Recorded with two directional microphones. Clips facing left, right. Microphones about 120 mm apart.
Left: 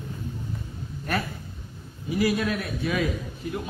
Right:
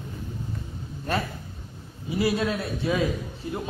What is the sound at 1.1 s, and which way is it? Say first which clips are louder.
A man's voice: right 1 dB; 25° right (ahead or behind).